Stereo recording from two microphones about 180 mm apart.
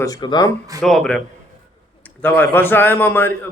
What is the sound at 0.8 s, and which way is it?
Speech, centre (ahead or behind).